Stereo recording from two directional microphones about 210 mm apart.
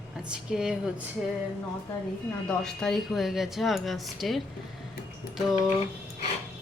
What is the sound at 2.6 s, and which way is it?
A woman's voice, centre (ahead or behind).